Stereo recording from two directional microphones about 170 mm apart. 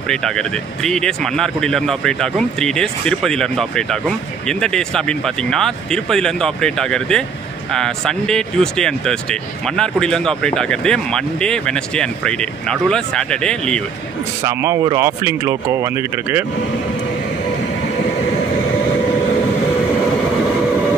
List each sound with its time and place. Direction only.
0.1 s speech: 5° left (ahead or behind)
14.4 s speech: 15° right (ahead or behind)